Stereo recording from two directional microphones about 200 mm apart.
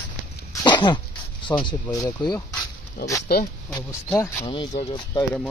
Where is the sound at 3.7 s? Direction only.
15° left (ahead or behind).